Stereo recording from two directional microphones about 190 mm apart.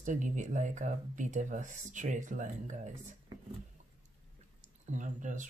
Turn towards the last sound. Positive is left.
turn(degrees=-40)  # may be behind; listen again after turning